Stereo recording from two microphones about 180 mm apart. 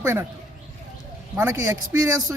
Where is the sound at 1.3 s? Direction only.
15° right (ahead or behind).